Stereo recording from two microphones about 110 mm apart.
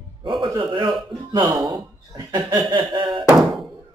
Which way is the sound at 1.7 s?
35° right (ahead or behind).